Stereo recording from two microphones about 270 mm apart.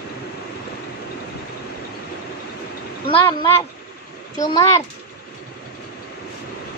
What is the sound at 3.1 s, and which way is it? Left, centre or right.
A child's voice, centre.